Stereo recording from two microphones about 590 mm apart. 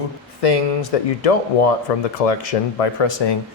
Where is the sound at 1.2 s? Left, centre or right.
Left.